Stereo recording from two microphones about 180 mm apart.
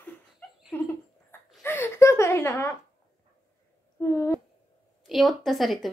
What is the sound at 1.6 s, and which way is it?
Speech, 15° left (ahead or behind).